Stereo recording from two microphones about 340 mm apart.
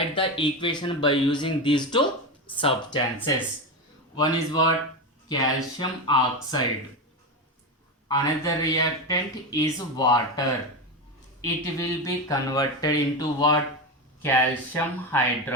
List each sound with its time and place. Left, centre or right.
0.2 s speech: centre
5.7 s speech: centre
8.0 s speech: centre